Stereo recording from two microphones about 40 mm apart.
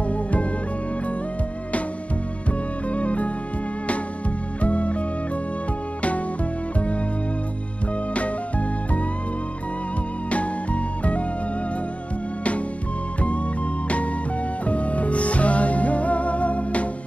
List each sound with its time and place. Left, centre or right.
0.1 s music: left
2.9 s music: left
4.6 s music: left
8.1 s music: left
10.3 s music: left
14.7 s music: left